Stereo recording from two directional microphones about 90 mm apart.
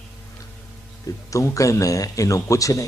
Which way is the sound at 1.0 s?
35° left (ahead or behind).